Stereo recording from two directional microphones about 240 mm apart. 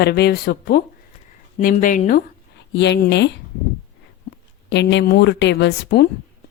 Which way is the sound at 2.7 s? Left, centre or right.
Left.